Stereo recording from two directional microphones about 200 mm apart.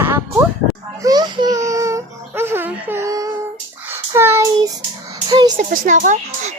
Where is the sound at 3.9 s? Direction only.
10° right (ahead or behind).